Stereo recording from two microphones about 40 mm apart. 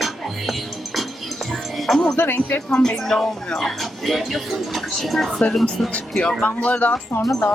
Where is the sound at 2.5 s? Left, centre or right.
Centre.